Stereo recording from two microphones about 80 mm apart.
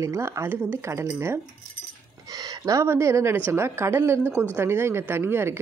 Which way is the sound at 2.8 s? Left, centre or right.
Right.